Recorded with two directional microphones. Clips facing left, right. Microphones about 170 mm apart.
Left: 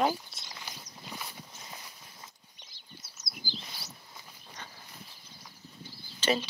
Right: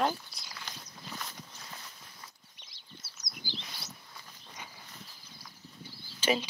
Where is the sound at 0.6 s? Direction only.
10° left (ahead or behind).